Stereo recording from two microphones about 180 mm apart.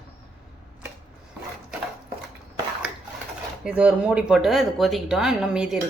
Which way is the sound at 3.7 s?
5° right (ahead or behind).